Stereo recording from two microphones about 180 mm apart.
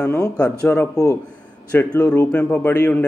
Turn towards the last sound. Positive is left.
turn(degrees=10)  # may be behind; listen again after turning